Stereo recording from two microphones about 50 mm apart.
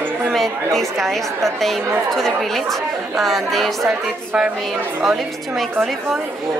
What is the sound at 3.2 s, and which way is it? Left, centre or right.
Speech, centre.